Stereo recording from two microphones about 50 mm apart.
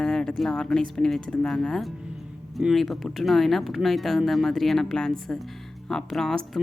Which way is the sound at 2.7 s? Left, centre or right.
Centre.